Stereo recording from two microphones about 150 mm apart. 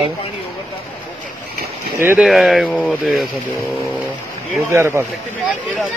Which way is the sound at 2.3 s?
Centre (ahead or behind).